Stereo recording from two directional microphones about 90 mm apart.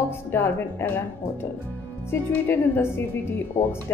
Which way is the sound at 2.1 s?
25° left (ahead or behind).